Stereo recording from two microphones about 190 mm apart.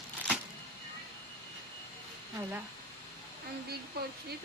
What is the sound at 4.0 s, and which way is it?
Speech, 55° right (ahead or behind).